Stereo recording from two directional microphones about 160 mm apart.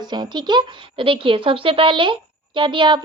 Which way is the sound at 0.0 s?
30° right (ahead or behind).